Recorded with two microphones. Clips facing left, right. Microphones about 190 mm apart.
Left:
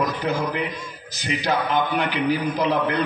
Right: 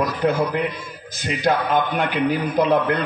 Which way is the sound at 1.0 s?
50° right (ahead or behind).